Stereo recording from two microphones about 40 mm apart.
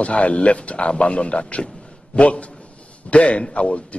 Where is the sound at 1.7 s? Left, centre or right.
Left.